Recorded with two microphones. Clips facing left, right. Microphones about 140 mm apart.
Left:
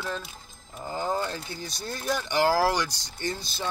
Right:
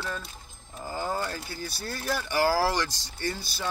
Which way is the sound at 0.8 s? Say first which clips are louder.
Left 2 dB; 20° left (ahead or behind).